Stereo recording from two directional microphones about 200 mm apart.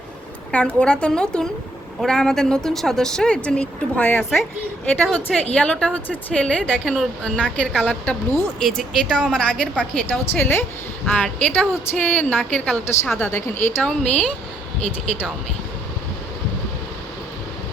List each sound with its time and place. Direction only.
0.5 s a woman's voice: 5° left (ahead or behind)